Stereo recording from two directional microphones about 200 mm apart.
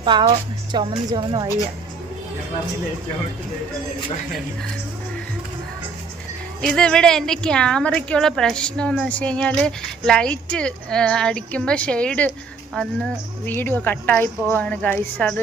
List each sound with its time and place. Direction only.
0.0 s a woman's voice: 20° right (ahead or behind)
6.6 s a woman's voice: 5° left (ahead or behind)